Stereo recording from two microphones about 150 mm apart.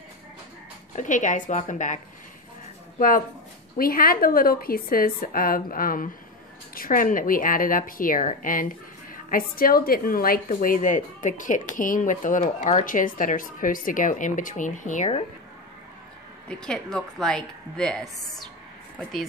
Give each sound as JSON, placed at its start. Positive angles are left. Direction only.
{"t": 0.9, "sound": "a woman's voice", "side_deg": 55}
{"t": 3.7, "sound": "a woman's voice", "side_deg": 75}
{"t": 16.4, "sound": "a woman's voice", "side_deg": 5}